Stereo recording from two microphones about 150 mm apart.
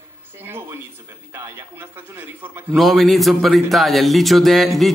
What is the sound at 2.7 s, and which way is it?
A man's voice, centre (ahead or behind).